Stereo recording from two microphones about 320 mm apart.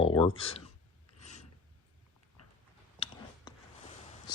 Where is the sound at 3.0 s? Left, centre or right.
Centre.